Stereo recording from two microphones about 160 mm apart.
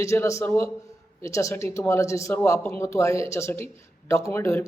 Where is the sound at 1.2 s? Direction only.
20° left (ahead or behind).